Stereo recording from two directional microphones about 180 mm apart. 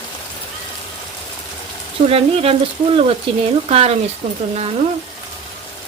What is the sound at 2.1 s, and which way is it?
Frying, 35° right (ahead or behind).